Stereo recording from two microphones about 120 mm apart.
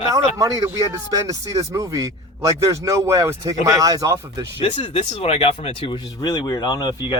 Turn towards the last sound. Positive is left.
turn(degrees=35)  # may be behind; listen again after turning